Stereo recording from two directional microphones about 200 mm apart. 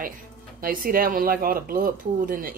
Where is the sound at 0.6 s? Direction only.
45° right (ahead or behind).